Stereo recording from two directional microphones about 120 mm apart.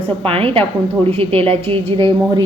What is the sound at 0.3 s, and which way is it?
A woman's voice, 50° right (ahead or behind).